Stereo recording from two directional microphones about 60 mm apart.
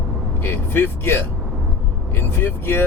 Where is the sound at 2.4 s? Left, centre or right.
Left.